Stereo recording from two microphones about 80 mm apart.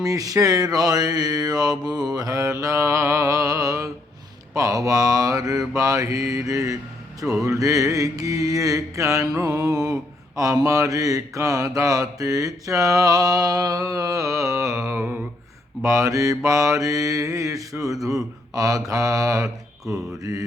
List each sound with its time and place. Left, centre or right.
0.0 s mantra: right
14.8 s a sound: right
15.8 s mantra: right